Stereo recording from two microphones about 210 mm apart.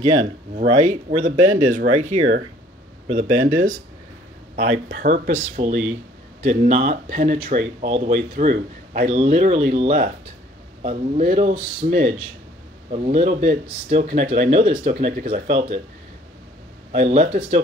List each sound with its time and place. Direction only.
0.0 s speech: 20° right (ahead or behind)
0.6 s speech: 35° right (ahead or behind)
5.0 s speech: 40° right (ahead or behind)
12.9 s speech: 30° right (ahead or behind)
16.9 s speech: 35° right (ahead or behind)